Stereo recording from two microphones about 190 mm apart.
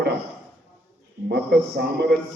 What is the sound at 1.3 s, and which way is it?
Speech, 60° right (ahead or behind).